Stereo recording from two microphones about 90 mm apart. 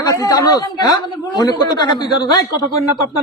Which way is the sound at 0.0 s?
40° left (ahead or behind).